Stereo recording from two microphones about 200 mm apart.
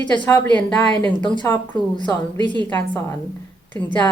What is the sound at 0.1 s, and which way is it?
A woman's voice, 20° left (ahead or behind).